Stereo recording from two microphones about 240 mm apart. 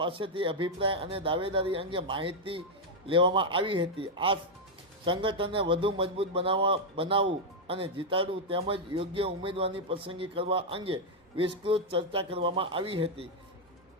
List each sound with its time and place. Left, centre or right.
0.0 s speech: right